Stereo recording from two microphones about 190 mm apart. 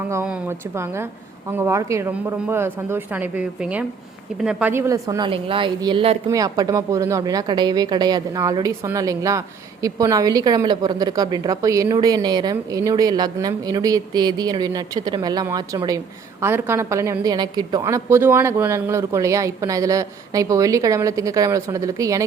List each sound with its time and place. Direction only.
0.1 s a woman's voice: 10° right (ahead or behind)